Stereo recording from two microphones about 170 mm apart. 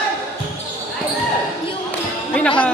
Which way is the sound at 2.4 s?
5° left (ahead or behind).